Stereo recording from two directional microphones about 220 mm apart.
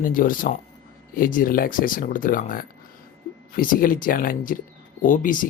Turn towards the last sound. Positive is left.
turn(degrees=35)  # may be behind; listen again after turning